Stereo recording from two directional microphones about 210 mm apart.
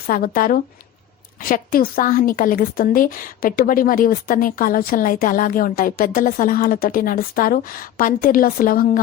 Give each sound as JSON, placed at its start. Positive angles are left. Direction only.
{"t": 0.1, "sound": "a woman's voice", "side_deg": 45}